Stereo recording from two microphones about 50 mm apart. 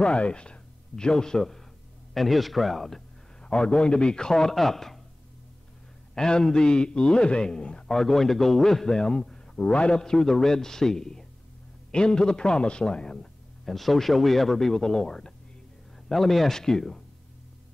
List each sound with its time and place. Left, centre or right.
0.0 s speech: left; by 3.0 s centre
3.4 s a man's voice: centre
6.1 s a man's voice: centre
8.0 s a man's voice: centre